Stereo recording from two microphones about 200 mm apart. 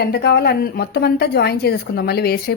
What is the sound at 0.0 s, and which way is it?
A woman's voice, 55° left (ahead or behind).